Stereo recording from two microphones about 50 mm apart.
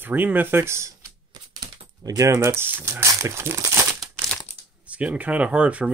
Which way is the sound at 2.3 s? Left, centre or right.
Right.